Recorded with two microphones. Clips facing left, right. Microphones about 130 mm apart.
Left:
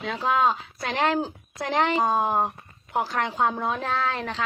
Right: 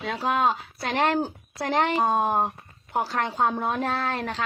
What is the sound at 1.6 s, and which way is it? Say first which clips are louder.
Speech: even; 50° right (ahead or behind).